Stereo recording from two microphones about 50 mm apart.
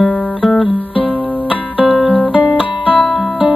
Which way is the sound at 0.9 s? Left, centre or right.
Right.